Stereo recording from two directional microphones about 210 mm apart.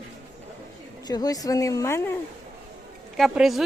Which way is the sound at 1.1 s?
20° left (ahead or behind).